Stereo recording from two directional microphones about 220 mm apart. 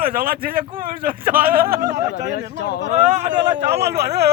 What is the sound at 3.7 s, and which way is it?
Speech, 50° right (ahead or behind).